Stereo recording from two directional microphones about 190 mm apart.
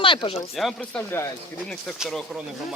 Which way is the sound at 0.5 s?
Centre (ahead or behind).